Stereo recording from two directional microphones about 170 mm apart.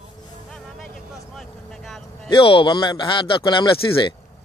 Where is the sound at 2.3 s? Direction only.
30° left (ahead or behind).